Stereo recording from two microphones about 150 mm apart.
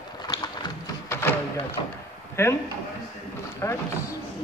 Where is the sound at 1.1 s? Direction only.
15° left (ahead or behind).